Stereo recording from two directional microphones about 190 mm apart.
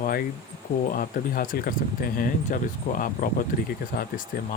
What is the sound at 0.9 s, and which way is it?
Speech, 45° left (ahead or behind).